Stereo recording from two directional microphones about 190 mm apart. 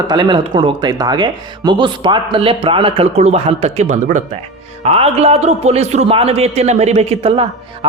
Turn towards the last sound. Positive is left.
turn(degrees=-30)  # may be behind; listen again after turning